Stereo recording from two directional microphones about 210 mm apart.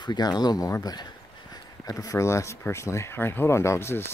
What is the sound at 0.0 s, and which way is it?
Speech, 20° left (ahead or behind).